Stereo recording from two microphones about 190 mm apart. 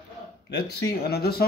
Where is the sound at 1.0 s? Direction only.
55° left (ahead or behind).